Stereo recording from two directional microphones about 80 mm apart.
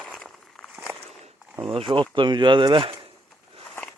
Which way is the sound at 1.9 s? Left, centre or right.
Right.